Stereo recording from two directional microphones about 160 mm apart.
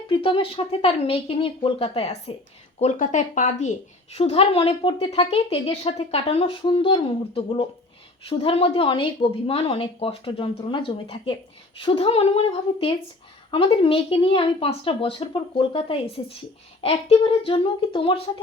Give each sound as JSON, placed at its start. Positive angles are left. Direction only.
{"t": 0.1, "sound": "speech", "side_deg": 30}
{"t": 13.8, "sound": "speech", "side_deg": 35}